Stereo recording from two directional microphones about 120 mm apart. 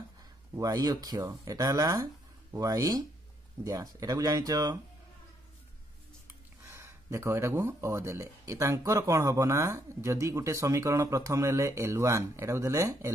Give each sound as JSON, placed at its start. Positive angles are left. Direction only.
{"t": 0.6, "sound": "speech", "side_deg": -35}
{"t": 6.6, "sound": "speech", "side_deg": -20}